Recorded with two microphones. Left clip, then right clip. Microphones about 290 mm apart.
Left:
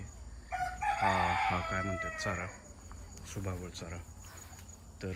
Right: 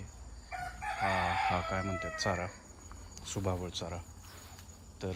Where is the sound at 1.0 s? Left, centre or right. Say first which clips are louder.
Left 1 dB; centre.